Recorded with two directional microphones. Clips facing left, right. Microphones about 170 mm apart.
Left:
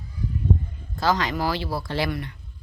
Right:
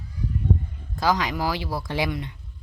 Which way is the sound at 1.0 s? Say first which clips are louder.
Even; 10° right (ahead or behind).